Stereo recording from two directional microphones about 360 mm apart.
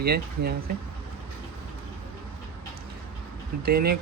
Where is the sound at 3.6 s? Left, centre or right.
Right.